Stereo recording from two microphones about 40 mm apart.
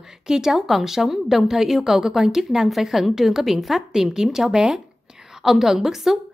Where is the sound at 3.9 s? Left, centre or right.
Centre.